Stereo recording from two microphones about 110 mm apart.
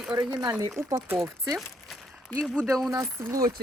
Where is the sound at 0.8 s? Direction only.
30° right (ahead or behind).